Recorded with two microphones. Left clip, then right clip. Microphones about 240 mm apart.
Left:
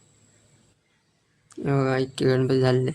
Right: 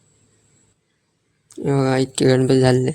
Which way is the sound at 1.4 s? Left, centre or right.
Centre.